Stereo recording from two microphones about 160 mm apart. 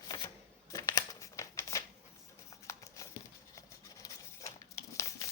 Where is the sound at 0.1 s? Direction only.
20° left (ahead or behind).